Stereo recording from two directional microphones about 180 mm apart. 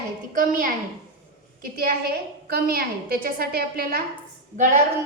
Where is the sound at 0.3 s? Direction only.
50° right (ahead or behind).